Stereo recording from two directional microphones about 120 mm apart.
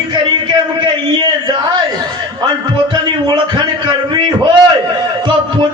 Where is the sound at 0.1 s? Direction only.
40° right (ahead or behind).